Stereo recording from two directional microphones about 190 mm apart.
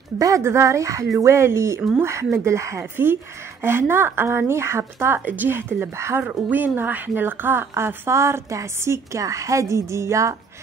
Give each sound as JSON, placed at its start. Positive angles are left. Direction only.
{"t": 0.2, "sound": "speech", "side_deg": -15}